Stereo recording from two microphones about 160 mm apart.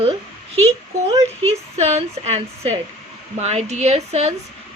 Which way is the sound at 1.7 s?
45° right (ahead or behind).